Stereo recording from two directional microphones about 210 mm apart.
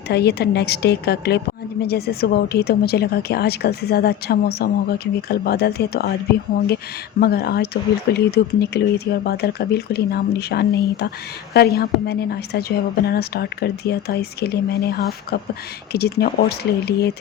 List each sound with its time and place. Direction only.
0.1 s a woman's voice: 50° left (ahead or behind)
7.2 s a woman's voice: 50° left (ahead or behind)